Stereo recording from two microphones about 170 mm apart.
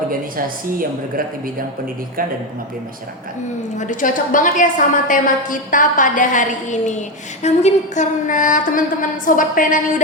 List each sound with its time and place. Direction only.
0.1 s a woman's voice: 55° right (ahead or behind)
3.8 s a woman's voice: 50° left (ahead or behind)